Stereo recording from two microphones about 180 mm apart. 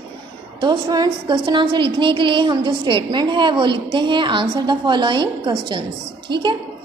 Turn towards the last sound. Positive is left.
turn(degrees=-25)  # may be behind; listen again after turning